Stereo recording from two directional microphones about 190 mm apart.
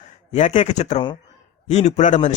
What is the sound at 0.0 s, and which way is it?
A man's voice, 40° left (ahead or behind).